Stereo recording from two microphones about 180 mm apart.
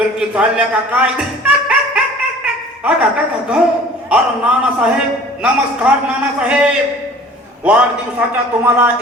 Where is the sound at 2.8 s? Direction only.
5° right (ahead or behind).